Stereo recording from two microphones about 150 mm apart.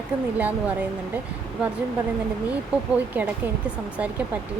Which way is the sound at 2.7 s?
10° right (ahead or behind).